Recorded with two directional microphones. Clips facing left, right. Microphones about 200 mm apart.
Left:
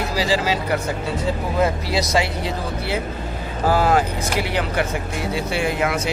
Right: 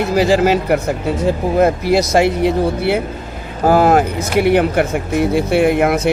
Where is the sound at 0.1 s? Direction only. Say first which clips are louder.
Right 10 dB; 55° right (ahead or behind).